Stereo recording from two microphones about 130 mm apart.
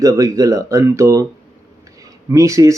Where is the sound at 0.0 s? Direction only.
25° right (ahead or behind).